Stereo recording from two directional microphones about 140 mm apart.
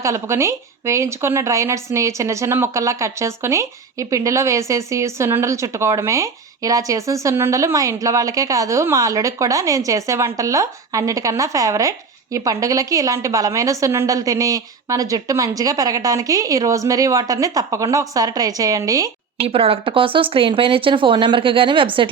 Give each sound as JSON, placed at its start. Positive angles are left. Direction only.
{"t": 0.0, "sound": "speech", "side_deg": -20}
{"t": 19.5, "sound": "speech", "side_deg": -45}